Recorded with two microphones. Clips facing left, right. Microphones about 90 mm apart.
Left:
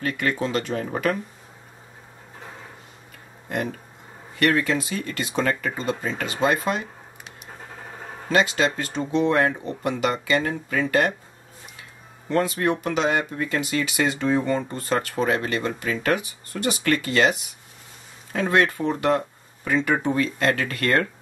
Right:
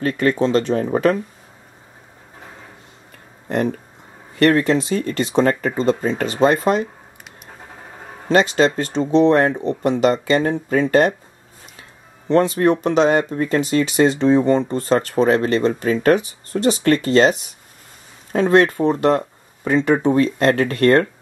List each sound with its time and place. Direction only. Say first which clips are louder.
0.0 s speech: right 7 dB; 35° right (ahead or behind)
4.4 s speech: right 6 dB; 35° right (ahead or behind)
8.3 s speech: right 6 dB; 35° right (ahead or behind)
12.3 s speech: right 7 dB; 30° right (ahead or behind)